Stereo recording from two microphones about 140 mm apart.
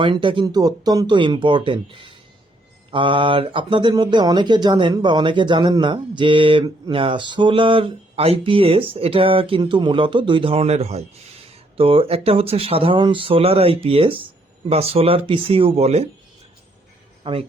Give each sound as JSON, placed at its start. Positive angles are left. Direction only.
{"t": 0.0, "sound": "speech", "side_deg": -35}
{"t": 17.2, "sound": "speech", "side_deg": -40}